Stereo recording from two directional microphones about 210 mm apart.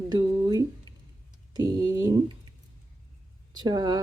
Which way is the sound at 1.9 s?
15° right (ahead or behind).